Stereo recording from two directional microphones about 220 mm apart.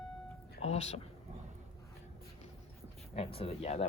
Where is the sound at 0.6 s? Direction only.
30° left (ahead or behind).